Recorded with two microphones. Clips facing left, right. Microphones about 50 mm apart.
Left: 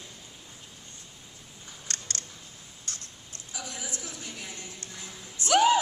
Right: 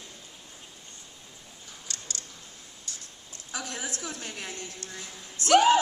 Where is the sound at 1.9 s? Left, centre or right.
Left.